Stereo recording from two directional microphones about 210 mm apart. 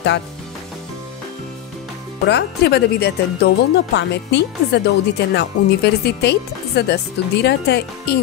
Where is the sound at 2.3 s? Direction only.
50° left (ahead or behind).